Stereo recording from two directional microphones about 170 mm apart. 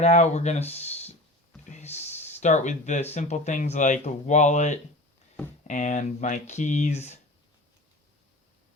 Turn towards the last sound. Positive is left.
turn(degrees=40)  # may be behind; listen again after turning